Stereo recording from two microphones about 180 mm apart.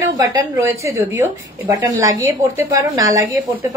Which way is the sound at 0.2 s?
20° right (ahead or behind).